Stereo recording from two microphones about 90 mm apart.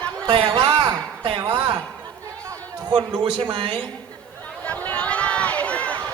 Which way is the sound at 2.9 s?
70° right (ahead or behind).